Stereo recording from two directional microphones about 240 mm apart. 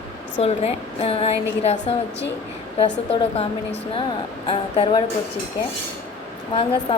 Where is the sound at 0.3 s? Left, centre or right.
Left.